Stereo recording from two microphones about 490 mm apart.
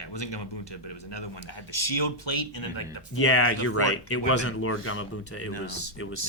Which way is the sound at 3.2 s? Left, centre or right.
Left.